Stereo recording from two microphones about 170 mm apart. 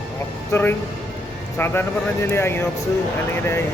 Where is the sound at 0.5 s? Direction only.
15° left (ahead or behind).